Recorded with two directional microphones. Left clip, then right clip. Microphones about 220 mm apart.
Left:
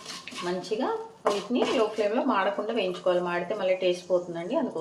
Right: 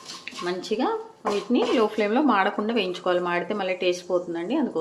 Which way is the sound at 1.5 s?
30° right (ahead or behind).